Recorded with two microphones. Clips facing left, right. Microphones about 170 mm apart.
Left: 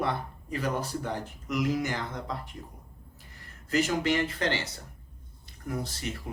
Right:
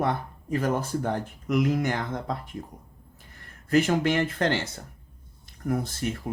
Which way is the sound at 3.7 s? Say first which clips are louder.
Right 4 dB; 55° right (ahead or behind).